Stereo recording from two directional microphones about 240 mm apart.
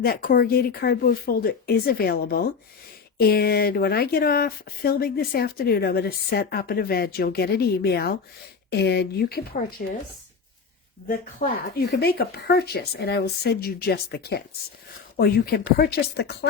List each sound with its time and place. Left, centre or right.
0.0 s speech: left
11.1 s speech: left